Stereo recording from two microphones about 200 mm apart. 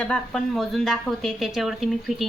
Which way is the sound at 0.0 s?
5° left (ahead or behind).